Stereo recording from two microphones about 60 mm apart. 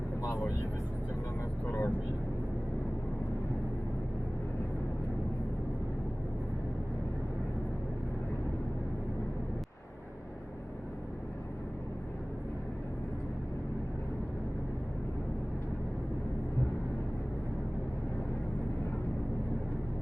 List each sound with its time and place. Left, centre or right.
1.6 s vehicle: left